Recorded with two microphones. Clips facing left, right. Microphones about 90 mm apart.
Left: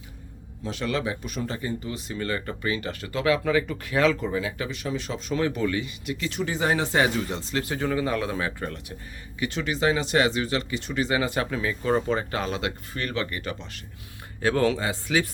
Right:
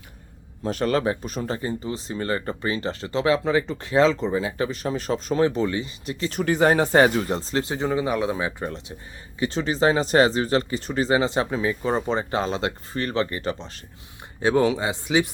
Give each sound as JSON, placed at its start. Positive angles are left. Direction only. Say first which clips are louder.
{"t": 0.6, "sound": "speech", "louder": "right 6 dB", "side_deg": -45}
{"t": 6.4, "sound": "speech", "louder": "right 7 dB", "side_deg": -55}
{"t": 9.4, "sound": "speech", "louder": "right 4 dB", "side_deg": -30}
{"t": 14.4, "sound": "speech", "louder": "right 3 dB", "side_deg": -20}